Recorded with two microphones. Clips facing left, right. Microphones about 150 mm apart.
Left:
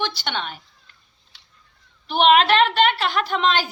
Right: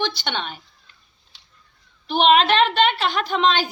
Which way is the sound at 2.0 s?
10° left (ahead or behind).